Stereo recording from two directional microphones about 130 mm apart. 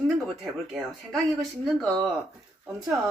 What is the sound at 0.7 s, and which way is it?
Speech, centre (ahead or behind).